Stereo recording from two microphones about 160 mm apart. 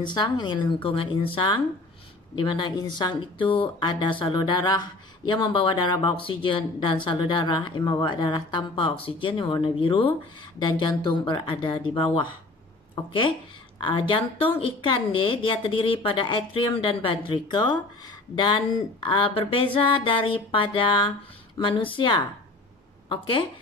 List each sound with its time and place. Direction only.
0.0 s speech: 30° left (ahead or behind)